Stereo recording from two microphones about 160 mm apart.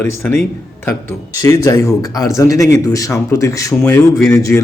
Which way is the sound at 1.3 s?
20° left (ahead or behind).